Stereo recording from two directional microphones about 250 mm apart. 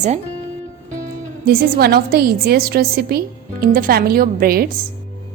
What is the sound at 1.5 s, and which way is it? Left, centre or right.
A woman's voice, right.